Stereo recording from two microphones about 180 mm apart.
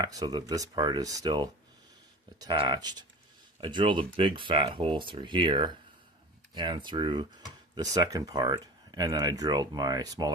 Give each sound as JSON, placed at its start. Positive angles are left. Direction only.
{"t": 0.0, "sound": "speech", "side_deg": -20}